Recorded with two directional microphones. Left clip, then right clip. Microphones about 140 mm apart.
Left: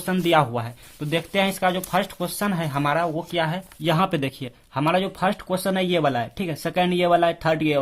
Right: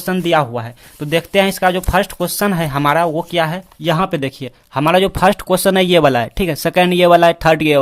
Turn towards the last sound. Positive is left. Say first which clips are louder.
# right 9 dB
turn(degrees=-40)  # may be behind; listen again after turning